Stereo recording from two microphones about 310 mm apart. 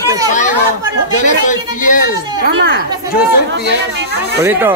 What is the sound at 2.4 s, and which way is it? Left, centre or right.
Speech, right.